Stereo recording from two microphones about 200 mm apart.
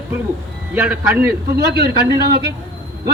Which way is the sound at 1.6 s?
55° right (ahead or behind).